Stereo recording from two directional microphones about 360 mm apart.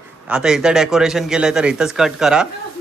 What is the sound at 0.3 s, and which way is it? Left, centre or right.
A man's voice, centre.